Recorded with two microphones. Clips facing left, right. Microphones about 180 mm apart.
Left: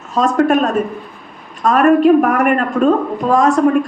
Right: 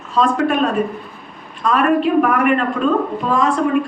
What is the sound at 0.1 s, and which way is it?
A woman's voice, 45° left (ahead or behind).